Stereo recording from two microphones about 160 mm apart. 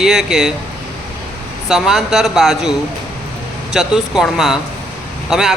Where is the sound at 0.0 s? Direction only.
5° right (ahead or behind).